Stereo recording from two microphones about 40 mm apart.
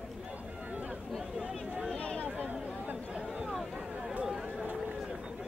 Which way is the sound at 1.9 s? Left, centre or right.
Left.